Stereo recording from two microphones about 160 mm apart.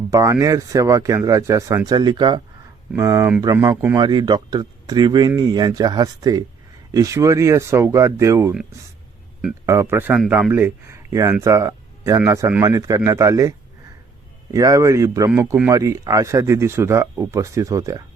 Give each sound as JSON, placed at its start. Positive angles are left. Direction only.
{"t": 0.1, "sound": "speech", "side_deg": -20}
{"t": 9.6, "sound": "speech", "side_deg": -15}
{"t": 14.5, "sound": "speech", "side_deg": -20}